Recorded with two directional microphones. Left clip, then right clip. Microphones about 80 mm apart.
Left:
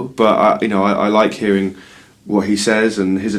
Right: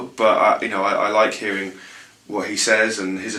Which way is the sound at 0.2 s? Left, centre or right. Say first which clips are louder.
Left 3 dB; left.